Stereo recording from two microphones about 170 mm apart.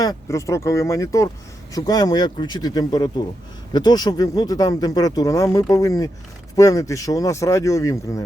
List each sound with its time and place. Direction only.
0.0 s speech: 20° left (ahead or behind)